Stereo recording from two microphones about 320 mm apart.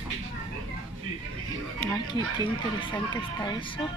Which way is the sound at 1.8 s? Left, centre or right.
Centre.